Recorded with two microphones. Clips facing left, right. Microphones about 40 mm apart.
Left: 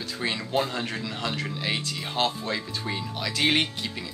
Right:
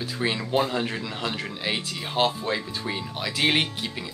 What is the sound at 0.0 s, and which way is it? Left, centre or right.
Speech, centre.